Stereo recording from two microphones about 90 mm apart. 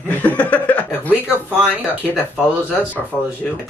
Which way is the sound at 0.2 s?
15° left (ahead or behind).